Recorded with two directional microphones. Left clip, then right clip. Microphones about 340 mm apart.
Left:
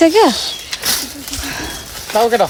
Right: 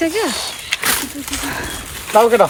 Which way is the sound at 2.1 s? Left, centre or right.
Right.